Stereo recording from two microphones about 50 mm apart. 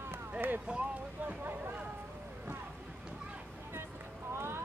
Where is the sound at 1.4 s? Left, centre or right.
Right.